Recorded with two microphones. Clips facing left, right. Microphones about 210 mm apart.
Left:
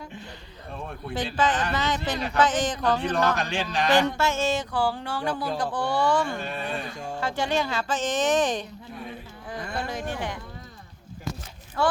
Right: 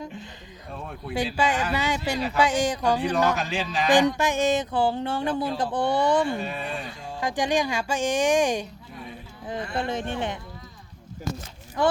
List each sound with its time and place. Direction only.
0.7 s speech: centre (ahead or behind)
1.1 s speech: 10° right (ahead or behind)
3.3 s speech: centre (ahead or behind)
3.9 s a sound: 15° right (ahead or behind)
6.3 s speech: centre (ahead or behind)
7.2 s speech: 15° right (ahead or behind)
9.7 s a sound: 25° right (ahead or behind)
11.8 s speech: 15° right (ahead or behind)